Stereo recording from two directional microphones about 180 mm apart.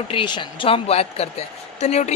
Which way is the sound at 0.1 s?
25° left (ahead or behind).